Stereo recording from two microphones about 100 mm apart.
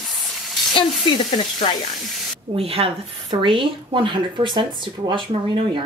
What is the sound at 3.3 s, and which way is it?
Speech, 55° right (ahead or behind).